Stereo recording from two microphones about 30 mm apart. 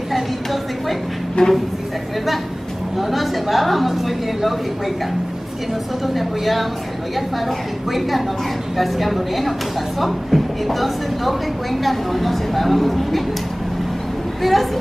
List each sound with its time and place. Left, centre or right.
0.1 s a sound: centre
1.4 s speech: left
3.0 s a woman's voice: centre
6.1 s a woman's voice: centre
8.7 s a woman's voice: centre
14.4 s a woman's voice: centre